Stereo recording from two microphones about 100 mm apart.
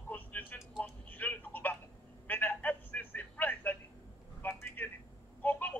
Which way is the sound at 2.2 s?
20° left (ahead or behind).